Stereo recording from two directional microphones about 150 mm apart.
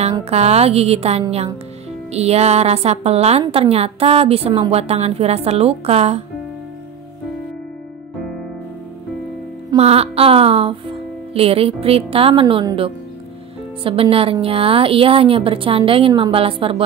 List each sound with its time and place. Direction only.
0.2 s a woman's voice: 45° right (ahead or behind)
9.8 s speech: 40° right (ahead or behind)